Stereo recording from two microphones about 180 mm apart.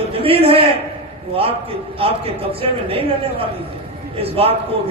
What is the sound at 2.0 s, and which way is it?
Speech, 30° right (ahead or behind).